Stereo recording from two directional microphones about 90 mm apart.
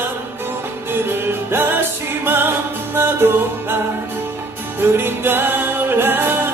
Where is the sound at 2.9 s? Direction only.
25° right (ahead or behind).